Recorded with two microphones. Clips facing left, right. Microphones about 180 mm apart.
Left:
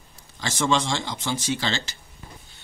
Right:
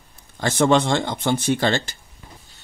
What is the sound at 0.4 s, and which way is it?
Speech, 55° right (ahead or behind).